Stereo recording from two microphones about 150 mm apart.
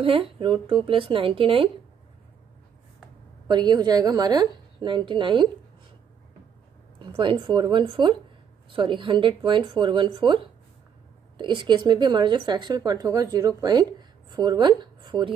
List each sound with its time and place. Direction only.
0.0 s speech: 35° right (ahead or behind)
3.4 s a woman's voice: 30° right (ahead or behind)
7.2 s a woman's voice: 35° right (ahead or behind)